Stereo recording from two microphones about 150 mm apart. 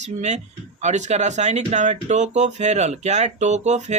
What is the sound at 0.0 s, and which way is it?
Speech, 50° right (ahead or behind).